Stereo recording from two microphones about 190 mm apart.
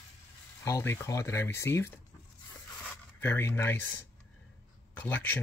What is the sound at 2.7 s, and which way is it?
Zipper, 10° left (ahead or behind).